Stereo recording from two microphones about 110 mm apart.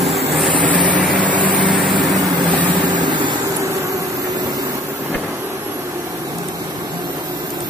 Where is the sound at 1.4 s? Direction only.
45° right (ahead or behind).